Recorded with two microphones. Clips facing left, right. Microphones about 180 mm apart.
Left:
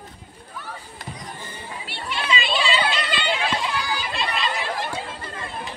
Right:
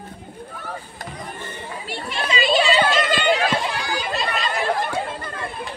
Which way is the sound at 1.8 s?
45° right (ahead or behind).